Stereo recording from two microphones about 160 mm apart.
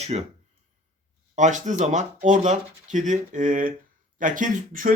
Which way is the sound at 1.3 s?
50° right (ahead or behind).